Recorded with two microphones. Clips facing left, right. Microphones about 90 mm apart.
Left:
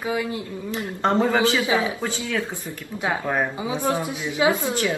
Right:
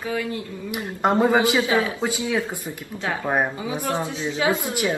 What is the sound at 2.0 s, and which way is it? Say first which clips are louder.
A man's voice: right 2 dB; 15° right (ahead or behind).